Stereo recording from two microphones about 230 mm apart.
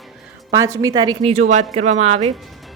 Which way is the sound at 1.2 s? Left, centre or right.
Right.